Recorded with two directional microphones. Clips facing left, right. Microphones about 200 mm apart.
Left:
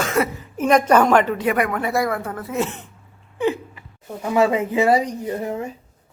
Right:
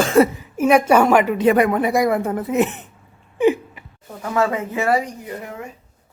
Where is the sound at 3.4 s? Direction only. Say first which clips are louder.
Right 5 dB; 15° right (ahead or behind).